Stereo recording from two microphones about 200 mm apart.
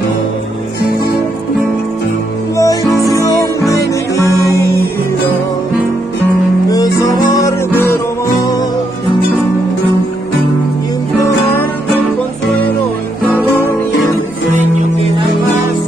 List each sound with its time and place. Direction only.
2.5 s music: 15° left (ahead or behind)
6.7 s music: 20° left (ahead or behind)